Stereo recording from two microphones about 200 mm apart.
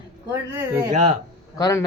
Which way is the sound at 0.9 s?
35° right (ahead or behind).